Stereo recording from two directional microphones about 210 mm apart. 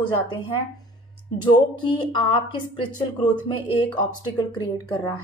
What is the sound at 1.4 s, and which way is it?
A woman's voice, 20° left (ahead or behind).